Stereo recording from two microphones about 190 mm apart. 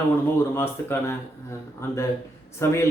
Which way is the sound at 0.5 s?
10° left (ahead or behind).